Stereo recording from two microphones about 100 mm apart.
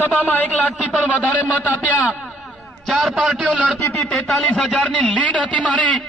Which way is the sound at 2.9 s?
Centre (ahead or behind).